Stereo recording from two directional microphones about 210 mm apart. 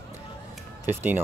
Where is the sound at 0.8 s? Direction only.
10° right (ahead or behind).